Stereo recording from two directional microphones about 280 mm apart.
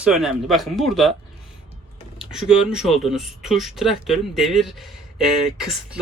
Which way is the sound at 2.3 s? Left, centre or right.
Centre.